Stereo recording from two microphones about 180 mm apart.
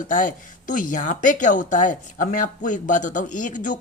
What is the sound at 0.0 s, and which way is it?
Speech, 45° left (ahead or behind).